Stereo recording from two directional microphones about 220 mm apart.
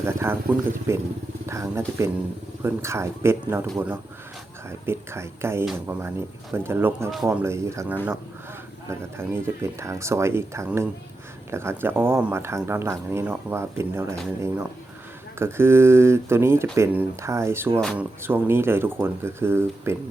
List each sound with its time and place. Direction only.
0.0 s speech: 10° right (ahead or behind)
15.4 s speech: 10° right (ahead or behind)
17.7 s speech: centre (ahead or behind)
18.2 s speech: 10° right (ahead or behind)